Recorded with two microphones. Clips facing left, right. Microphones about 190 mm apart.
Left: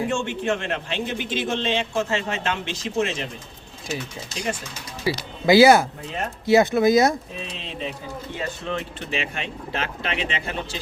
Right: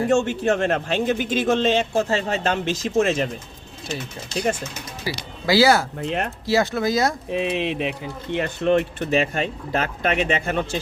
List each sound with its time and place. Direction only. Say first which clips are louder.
0.1 s a man's voice: right 5 dB; 40° right (ahead or behind)
5.0 s speech: left 5 dB; 20° left (ahead or behind)
6.0 s speech: right 6 dB; 70° right (ahead or behind)
6.4 s speech: left 6 dB; 20° left (ahead or behind)
7.3 s speech: right 12 dB; 65° right (ahead or behind)
9.0 s a man's voice: right 8 dB; 40° right (ahead or behind)